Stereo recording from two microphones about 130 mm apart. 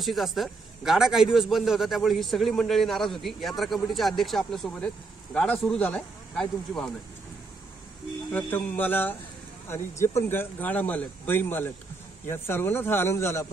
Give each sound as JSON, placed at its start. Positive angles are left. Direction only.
{"t": 0.0, "sound": "a man's voice", "side_deg": 0}
{"t": 8.3, "sound": "speech", "side_deg": 10}